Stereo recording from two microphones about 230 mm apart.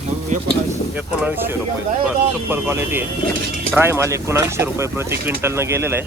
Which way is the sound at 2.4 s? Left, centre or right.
Centre.